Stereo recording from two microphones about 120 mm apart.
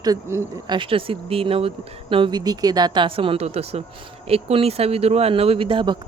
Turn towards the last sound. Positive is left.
turn(degrees=-45)  # may be behind; listen again after turning